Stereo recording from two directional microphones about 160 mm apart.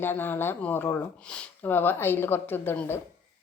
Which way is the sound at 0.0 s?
15° left (ahead or behind).